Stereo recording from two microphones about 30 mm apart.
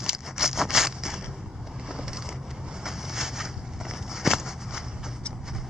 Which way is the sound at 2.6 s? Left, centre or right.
Centre.